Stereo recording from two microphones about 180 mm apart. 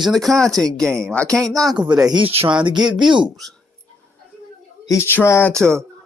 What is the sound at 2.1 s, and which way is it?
Speech, 30° right (ahead or behind).